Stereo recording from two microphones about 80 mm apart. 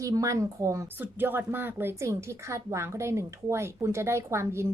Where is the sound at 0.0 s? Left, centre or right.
Right.